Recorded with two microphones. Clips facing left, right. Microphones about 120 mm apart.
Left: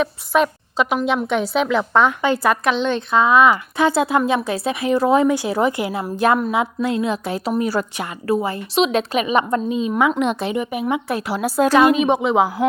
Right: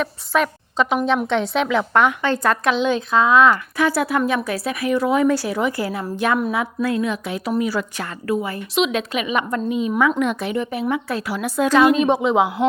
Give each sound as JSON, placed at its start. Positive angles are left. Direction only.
{"t": 0.0, "sound": "a woman's voice", "side_deg": 20}
{"t": 1.8, "sound": "speech", "side_deg": 0}
{"t": 2.2, "sound": "a woman's voice", "side_deg": 10}
{"t": 2.7, "sound": "speech", "side_deg": -5}
{"t": 3.8, "sound": "a woman's voice", "side_deg": 25}
{"t": 5.7, "sound": "speech", "side_deg": 20}
{"t": 6.1, "sound": "a woman's voice", "side_deg": 35}
{"t": 6.5, "sound": "a woman's voice", "side_deg": 25}
{"t": 8.3, "sound": "a woman's voice", "side_deg": 30}
{"t": 11.9, "sound": "speech", "side_deg": 0}